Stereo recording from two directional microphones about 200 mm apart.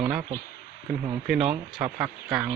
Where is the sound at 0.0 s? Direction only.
5° right (ahead or behind).